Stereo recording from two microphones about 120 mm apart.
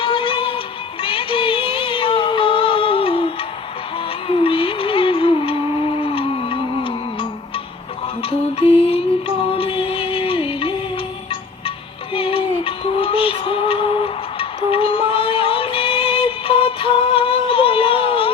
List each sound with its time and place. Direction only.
0.0 s music: 45° left (ahead or behind)
12.1 s synthetic singing: 50° left (ahead or behind)